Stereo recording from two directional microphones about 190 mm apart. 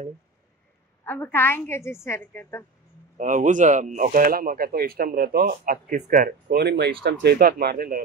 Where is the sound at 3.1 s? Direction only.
40° right (ahead or behind).